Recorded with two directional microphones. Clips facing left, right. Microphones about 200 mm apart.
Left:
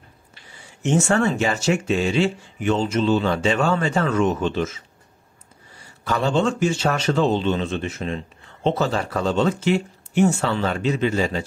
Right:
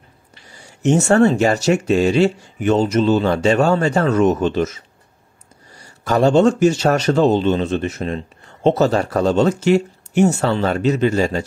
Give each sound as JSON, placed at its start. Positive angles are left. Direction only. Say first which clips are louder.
{"t": 0.5, "sound": "speech", "louder": "right 5 dB", "side_deg": -40}
{"t": 5.7, "sound": "a sound", "louder": "right 5 dB", "side_deg": -40}
{"t": 6.6, "sound": "speech", "louder": "right 6 dB", "side_deg": -40}